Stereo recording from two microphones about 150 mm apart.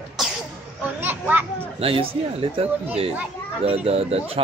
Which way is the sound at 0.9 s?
15° right (ahead or behind).